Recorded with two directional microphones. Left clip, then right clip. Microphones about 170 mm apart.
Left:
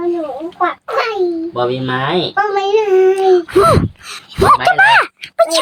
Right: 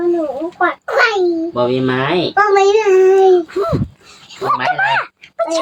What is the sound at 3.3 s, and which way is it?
Speech, 55° left (ahead or behind).